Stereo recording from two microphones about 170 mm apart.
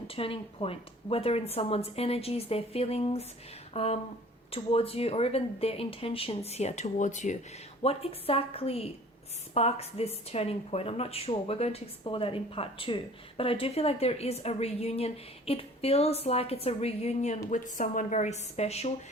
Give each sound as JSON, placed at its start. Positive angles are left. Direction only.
{"t": 0.1, "sound": "a woman's voice", "side_deg": 35}